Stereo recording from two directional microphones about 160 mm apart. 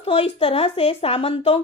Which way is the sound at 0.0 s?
35° left (ahead or behind).